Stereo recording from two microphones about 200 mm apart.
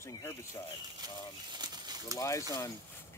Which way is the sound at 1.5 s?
20° right (ahead or behind).